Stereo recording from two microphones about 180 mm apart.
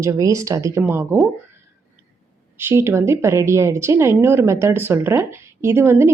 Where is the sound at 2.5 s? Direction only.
15° right (ahead or behind).